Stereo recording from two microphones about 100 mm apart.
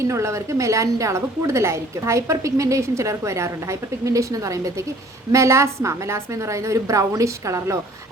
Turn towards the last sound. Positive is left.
turn(degrees=-30)  # may be behind; listen again after turning